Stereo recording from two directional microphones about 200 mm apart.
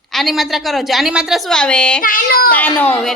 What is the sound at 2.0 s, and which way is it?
Child singing, 45° left (ahead or behind).